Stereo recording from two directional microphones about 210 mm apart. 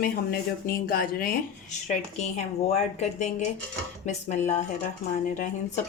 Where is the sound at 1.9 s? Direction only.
30° left (ahead or behind).